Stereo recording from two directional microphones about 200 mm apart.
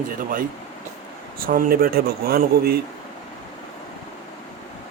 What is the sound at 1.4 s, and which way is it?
Speech, 45° right (ahead or behind).